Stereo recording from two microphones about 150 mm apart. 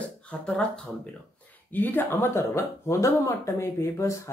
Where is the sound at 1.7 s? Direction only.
10° left (ahead or behind).